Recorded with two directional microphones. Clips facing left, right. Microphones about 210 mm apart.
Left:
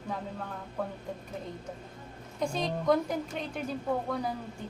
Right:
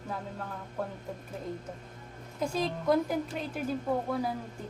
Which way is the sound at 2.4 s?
5° right (ahead or behind).